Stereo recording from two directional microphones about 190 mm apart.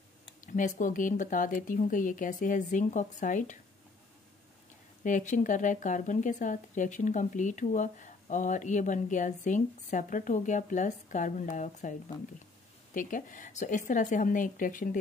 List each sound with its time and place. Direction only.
0.5 s speech: 40° left (ahead or behind)
5.0 s speech: 40° left (ahead or behind)
12.9 s speech: 45° left (ahead or behind)